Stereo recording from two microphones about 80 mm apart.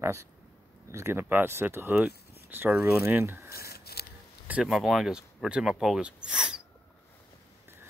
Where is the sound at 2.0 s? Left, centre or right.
Right.